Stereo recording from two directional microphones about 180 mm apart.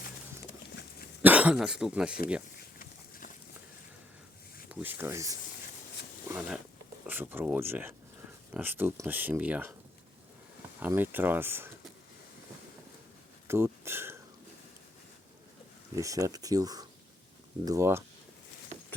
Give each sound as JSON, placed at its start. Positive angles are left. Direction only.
{"t": 1.2, "sound": "speech", "side_deg": -10}
{"t": 2.7, "sound": "a sound", "side_deg": 50}
{"t": 4.7, "sound": "speech", "side_deg": -10}
{"t": 6.3, "sound": "a sound", "side_deg": -15}
{"t": 7.1, "sound": "speech", "side_deg": -10}
{"t": 10.8, "sound": "speech", "side_deg": -10}
{"t": 13.5, "sound": "speech", "side_deg": -15}
{"t": 16.0, "sound": "speech", "side_deg": -15}